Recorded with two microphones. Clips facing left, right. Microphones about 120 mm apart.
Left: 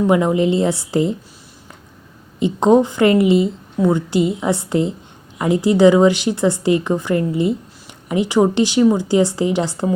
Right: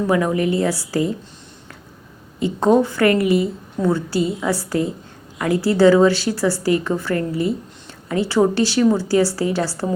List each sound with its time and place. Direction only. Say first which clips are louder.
0.1 s a woman's voice: left 3 dB; 20° left (ahead or behind)
2.4 s a woman's voice: left 2 dB; 20° left (ahead or behind)